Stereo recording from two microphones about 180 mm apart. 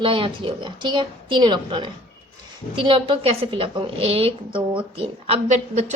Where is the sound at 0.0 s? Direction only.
30° right (ahead or behind).